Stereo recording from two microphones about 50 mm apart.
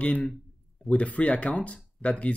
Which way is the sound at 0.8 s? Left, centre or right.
Left.